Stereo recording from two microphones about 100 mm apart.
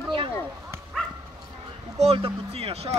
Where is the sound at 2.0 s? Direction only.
90° right.